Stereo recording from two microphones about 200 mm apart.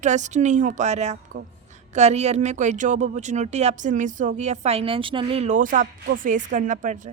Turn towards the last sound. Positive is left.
turn(degrees=-40)  # may be behind; listen again after turning